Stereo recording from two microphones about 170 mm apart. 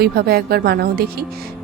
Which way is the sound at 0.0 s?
65° right (ahead or behind).